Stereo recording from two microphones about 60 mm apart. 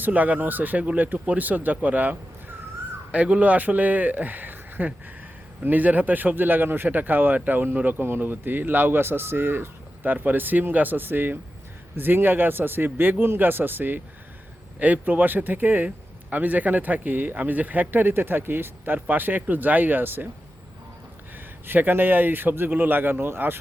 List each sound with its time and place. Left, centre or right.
0.0 s speech: right
21.3 s speech: right